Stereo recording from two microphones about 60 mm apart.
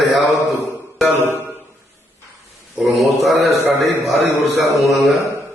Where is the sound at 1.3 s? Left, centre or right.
Right.